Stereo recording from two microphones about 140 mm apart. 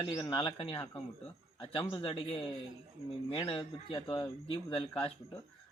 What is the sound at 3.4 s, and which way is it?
Speech, 40° left (ahead or behind).